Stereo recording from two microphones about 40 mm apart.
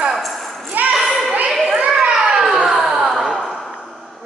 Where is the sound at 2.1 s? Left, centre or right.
Centre.